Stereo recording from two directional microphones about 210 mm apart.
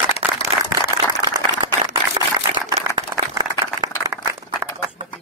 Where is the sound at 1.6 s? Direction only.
20° right (ahead or behind).